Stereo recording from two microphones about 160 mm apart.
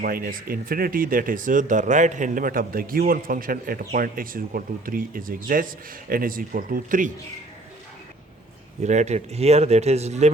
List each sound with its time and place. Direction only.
0.0 s speech: 65° right (ahead or behind)
8.8 s speech: 45° right (ahead or behind)